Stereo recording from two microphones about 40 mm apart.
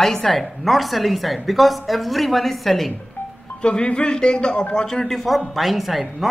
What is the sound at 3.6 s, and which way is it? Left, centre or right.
Speech, left.